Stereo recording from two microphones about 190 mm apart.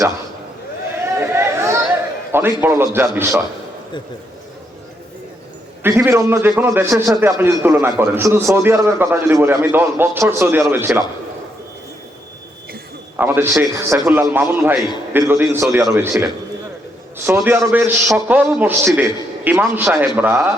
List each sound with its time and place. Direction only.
1.3 s chatter: 15° right (ahead or behind)
2.3 s a man's voice: 10° right (ahead or behind)
5.8 s a man's voice: 15° right (ahead or behind)
13.1 s a man's voice: 10° right (ahead or behind)
17.2 s a man's voice: 15° right (ahead or behind)